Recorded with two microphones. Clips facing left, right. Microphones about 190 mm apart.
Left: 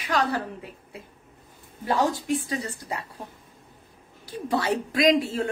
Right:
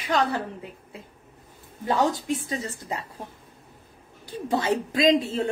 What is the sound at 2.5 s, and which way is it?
Speech, 20° right (ahead or behind).